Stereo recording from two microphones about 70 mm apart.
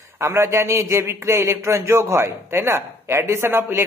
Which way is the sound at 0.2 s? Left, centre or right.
Right.